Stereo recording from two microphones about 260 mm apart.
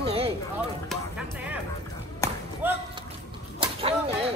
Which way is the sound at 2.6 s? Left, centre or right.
Centre.